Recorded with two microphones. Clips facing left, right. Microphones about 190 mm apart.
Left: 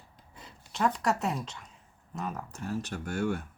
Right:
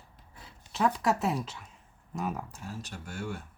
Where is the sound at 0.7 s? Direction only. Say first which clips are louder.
Right 1 dB; centre (ahead or behind).